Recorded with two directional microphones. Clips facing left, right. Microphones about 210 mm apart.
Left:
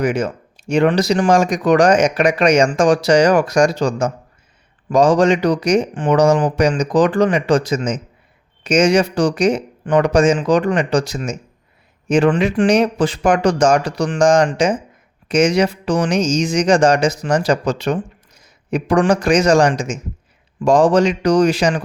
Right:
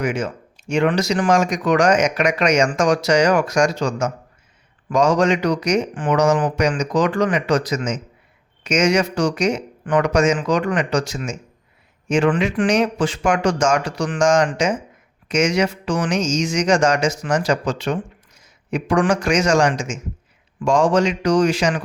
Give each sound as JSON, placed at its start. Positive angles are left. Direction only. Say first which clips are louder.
{"t": 0.0, "sound": "speech", "louder": "left 4 dB", "side_deg": 40}